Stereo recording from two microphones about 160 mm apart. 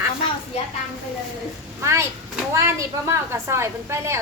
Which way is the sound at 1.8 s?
15° right (ahead or behind).